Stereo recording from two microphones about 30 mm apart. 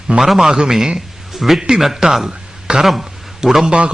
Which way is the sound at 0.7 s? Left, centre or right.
Centre.